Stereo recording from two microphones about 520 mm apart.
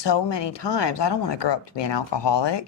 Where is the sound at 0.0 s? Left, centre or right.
Left.